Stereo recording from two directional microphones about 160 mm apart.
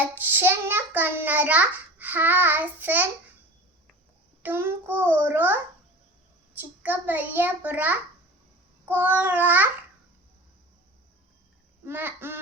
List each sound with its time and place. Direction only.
0.0 s child singing: 10° right (ahead or behind)
4.4 s child singing: 15° right (ahead or behind)
6.6 s child singing: 10° right (ahead or behind)
11.9 s child singing: 15° right (ahead or behind)